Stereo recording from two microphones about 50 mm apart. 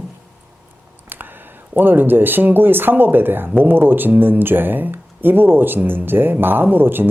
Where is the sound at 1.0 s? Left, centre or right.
Right.